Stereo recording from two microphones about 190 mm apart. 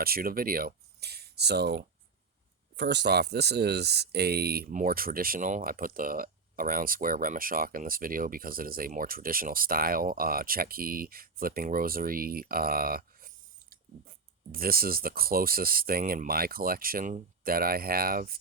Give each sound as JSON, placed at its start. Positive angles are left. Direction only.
{"t": 0.0, "sound": "speech", "side_deg": -50}